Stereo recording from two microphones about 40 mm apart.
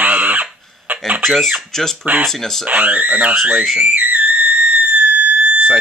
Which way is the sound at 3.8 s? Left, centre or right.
Right.